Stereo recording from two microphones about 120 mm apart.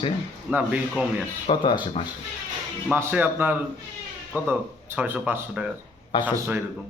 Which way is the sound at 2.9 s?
15° right (ahead or behind).